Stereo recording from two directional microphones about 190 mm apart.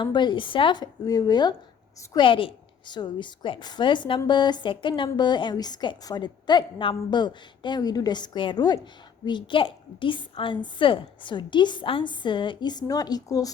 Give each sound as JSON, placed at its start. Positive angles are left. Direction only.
{"t": 0.0, "sound": "a woman's voice", "side_deg": 25}